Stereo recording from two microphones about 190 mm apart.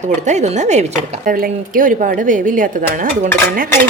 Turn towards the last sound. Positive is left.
turn(degrees=-45)  # may be behind; listen again after turning